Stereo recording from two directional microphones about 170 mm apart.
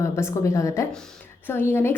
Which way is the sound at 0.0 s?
15° left (ahead or behind).